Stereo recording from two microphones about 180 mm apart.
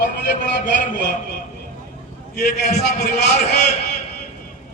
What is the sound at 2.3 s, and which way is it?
Speech, 65° left (ahead or behind).